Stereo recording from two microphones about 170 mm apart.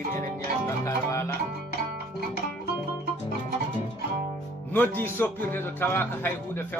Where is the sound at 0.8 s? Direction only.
15° left (ahead or behind).